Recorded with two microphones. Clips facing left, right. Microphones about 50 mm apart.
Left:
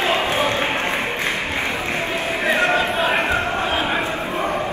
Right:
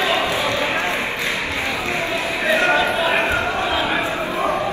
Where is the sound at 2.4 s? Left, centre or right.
Centre.